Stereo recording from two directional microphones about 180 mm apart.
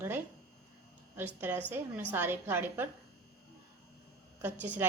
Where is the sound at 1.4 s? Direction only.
10° right (ahead or behind).